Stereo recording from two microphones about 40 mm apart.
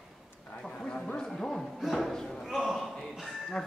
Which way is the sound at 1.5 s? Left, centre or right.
Centre.